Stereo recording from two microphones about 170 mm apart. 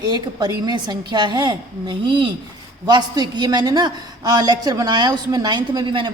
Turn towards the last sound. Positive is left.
turn(degrees=-30)  # may be behind; listen again after turning